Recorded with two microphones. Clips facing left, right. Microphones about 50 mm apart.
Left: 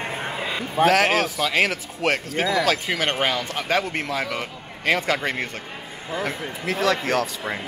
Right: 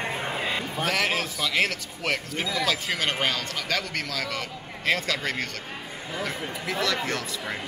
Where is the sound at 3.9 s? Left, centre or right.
Left.